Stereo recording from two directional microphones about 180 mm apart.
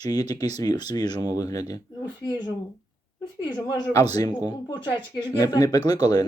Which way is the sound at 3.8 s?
20° left (ahead or behind).